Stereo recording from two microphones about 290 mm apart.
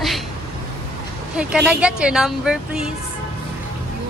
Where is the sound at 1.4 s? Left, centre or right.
Centre.